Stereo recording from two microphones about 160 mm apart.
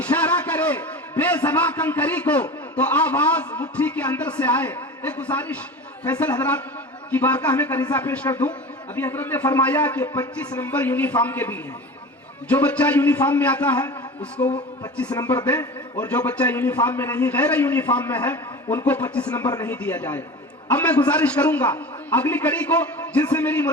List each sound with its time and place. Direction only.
0.0 s a man's voice: 10° left (ahead or behind)
19.3 s speech: 25° left (ahead or behind)
19.6 s a man's voice: 10° left (ahead or behind)